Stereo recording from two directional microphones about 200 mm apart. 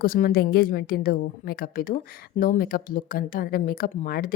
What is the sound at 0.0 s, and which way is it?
A woman's voice, 45° left (ahead or behind).